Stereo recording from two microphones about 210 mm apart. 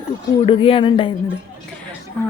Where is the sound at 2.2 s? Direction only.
5° left (ahead or behind).